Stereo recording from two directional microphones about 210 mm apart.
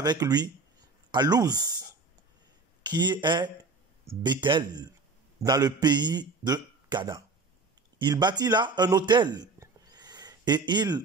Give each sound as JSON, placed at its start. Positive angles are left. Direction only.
{"t": 0.0, "sound": "a man's voice", "side_deg": -20}